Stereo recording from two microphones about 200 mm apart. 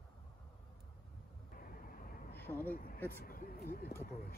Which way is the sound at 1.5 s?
45° left (ahead or behind).